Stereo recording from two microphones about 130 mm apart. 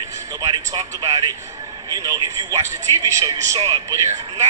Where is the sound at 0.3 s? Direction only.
30° right (ahead or behind).